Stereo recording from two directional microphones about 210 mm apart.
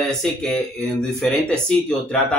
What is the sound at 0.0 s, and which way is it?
Speech, centre (ahead or behind).